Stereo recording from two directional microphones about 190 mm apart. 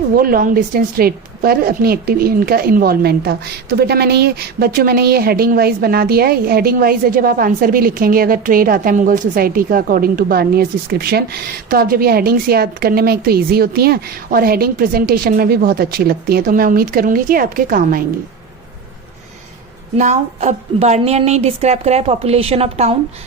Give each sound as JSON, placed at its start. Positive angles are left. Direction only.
{"t": 0.2, "sound": "a woman's voice", "side_deg": -45}
{"t": 20.0, "sound": "a woman's voice", "side_deg": -40}